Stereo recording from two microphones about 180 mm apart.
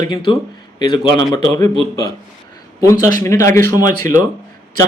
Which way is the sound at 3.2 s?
15° left (ahead or behind).